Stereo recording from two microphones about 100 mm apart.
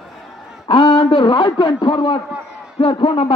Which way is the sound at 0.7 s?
55° left (ahead or behind).